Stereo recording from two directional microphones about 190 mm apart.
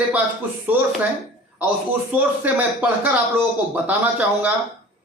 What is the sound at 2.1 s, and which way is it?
A man's voice, 10° right (ahead or behind).